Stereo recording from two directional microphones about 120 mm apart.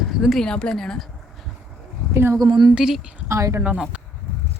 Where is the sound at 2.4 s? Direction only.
35° right (ahead or behind).